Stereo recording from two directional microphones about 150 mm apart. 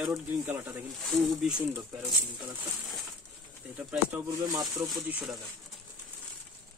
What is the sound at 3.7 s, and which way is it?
Speech, 10° right (ahead or behind).